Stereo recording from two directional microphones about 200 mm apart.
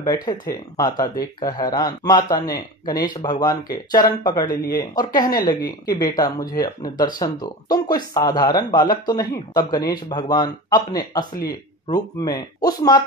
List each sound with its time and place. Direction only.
0.0 s speech: 20° left (ahead or behind)